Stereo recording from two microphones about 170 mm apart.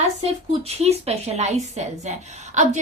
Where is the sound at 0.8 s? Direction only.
40° right (ahead or behind).